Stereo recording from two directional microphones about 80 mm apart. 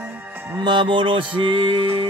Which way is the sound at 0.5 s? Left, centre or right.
Right.